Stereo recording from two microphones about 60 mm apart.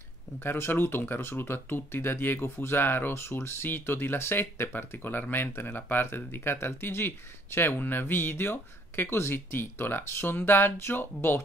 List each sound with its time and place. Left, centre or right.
0.4 s speech: left